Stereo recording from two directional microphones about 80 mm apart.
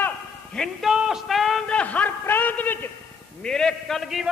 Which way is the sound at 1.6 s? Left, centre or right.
Centre.